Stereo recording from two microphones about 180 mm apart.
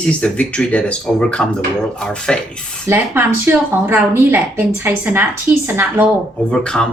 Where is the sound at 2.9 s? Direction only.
10° right (ahead or behind).